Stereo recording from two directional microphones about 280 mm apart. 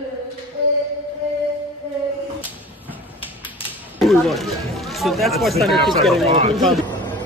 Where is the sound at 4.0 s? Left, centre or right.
Centre.